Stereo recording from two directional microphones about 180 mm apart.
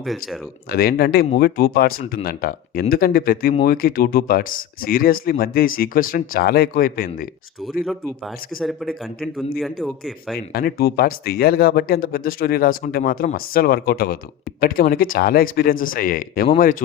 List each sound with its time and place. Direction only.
0.0 s speech: centre (ahead or behind)
0.7 s speech: 60° left (ahead or behind)
7.9 s speech: centre (ahead or behind)
10.3 s speech: 60° left (ahead or behind)